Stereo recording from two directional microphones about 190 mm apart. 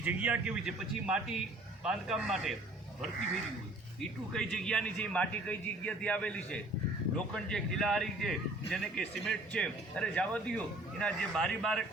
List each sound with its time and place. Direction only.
0.0 s a man's voice: 10° right (ahead or behind)
4.3 s a man's voice: 5° left (ahead or behind)